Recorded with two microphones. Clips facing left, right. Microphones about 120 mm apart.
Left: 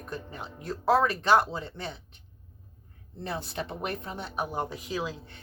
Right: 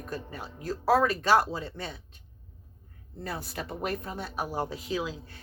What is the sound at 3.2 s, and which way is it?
Speech, 25° left (ahead or behind).